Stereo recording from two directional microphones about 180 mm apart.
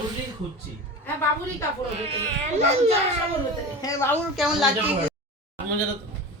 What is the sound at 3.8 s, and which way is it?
Speech, 20° left (ahead or behind).